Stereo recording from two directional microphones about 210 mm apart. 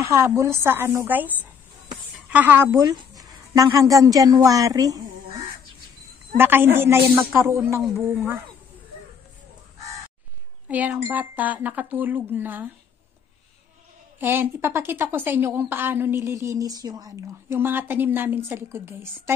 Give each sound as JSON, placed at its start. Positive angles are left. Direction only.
{"t": 0.0, "sound": "a woman's voice", "side_deg": -10}
{"t": 10.7, "sound": "speech", "side_deg": -10}
{"t": 14.2, "sound": "speech", "side_deg": -10}